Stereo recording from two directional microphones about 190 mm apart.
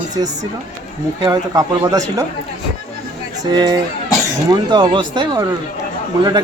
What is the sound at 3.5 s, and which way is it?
Speech, 20° right (ahead or behind).